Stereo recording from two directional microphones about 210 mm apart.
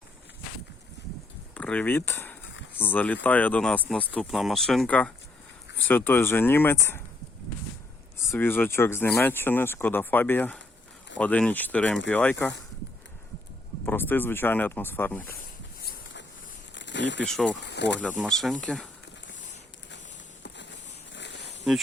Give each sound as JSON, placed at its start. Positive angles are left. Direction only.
{"t": 1.5, "sound": "a sound", "side_deg": 5}
{"t": 3.2, "sound": "speech", "side_deg": 10}
{"t": 8.2, "sound": "speech", "side_deg": 10}
{"t": 13.8, "sound": "speech", "side_deg": 10}
{"t": 16.7, "sound": "a sound", "side_deg": 60}
{"t": 17.2, "sound": "speech", "side_deg": 0}
{"t": 17.6, "sound": "speech", "side_deg": 55}
{"t": 18.2, "sound": "speech", "side_deg": 0}
{"t": 20.4, "sound": "a sound", "side_deg": 55}